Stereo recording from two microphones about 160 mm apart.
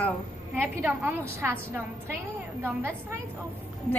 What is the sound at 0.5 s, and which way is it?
A woman's voice, 10° right (ahead or behind).